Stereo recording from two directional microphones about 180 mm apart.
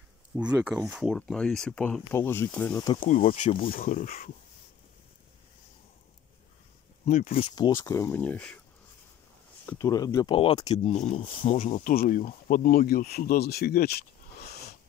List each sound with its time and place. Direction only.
0.3 s speech: 20° right (ahead or behind)
0.7 s speech: 5° right (ahead or behind)
3.0 s speech: 45° left (ahead or behind)
7.1 s speech: 45° left (ahead or behind)
7.4 s speech: 25° left (ahead or behind); by 8.5 s 5° left (ahead or behind)
9.7 s speech: 20° left (ahead or behind)
10.8 s speech: 40° left (ahead or behind); by 13.9 s 60° left (ahead or behind)
14.5 s wheeze: 65° left (ahead or behind)